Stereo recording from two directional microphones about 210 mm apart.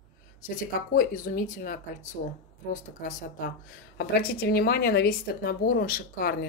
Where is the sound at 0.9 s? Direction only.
40° left (ahead or behind).